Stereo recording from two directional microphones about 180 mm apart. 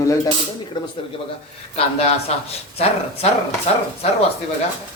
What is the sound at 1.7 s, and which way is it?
Speech, 35° left (ahead or behind).